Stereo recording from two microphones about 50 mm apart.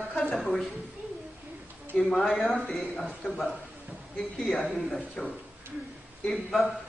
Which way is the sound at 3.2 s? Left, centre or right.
Left.